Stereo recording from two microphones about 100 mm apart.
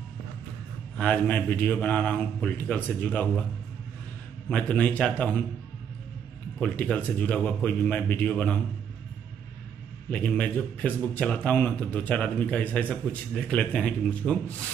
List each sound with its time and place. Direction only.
0.9 s speech: 15° left (ahead or behind)
4.5 s speech: 10° left (ahead or behind)
6.6 s speech: 15° left (ahead or behind)
10.0 s speech: 15° left (ahead or behind)